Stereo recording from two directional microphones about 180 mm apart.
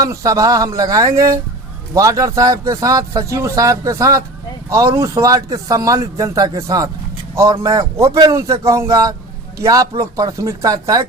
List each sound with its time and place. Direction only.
0.0 s a man's voice: 20° right (ahead or behind)